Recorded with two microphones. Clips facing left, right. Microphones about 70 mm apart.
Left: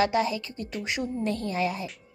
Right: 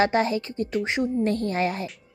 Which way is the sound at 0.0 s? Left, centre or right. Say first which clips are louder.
Right 3 dB; right.